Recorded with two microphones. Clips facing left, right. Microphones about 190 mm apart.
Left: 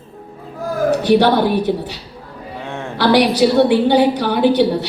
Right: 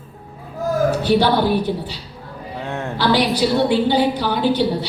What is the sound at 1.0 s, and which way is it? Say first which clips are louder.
Speech: left 5 dB; 65° left (ahead or behind).